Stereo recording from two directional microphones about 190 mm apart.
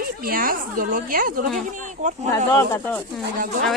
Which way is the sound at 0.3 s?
50° right (ahead or behind).